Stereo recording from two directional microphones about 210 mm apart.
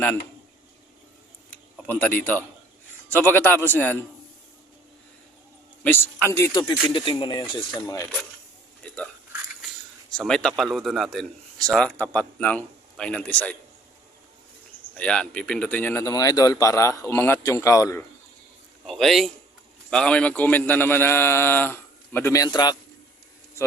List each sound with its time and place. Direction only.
1.9 s speech: 5° left (ahead or behind)
5.8 s speech: 10° left (ahead or behind)
10.1 s a man's voice: 5° left (ahead or behind)
14.9 s speech: 5° left (ahead or behind)
18.9 s a man's voice: centre (ahead or behind); by 22.8 s 20° left (ahead or behind)